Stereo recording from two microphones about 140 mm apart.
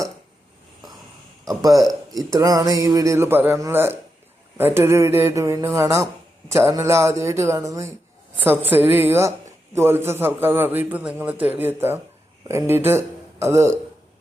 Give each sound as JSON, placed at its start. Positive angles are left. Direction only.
{"t": 1.5, "sound": "a man's voice", "side_deg": -25}